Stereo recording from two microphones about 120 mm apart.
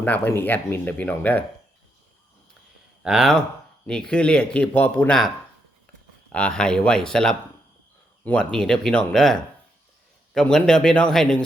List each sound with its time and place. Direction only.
0.0 s speech: 15° left (ahead or behind)
3.0 s speech: 5° right (ahead or behind); by 5.1 s 15° left (ahead or behind)
6.3 s speech: 10° left (ahead or behind)